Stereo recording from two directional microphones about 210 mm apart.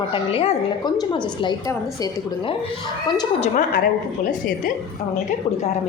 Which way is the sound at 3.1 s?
20° left (ahead or behind).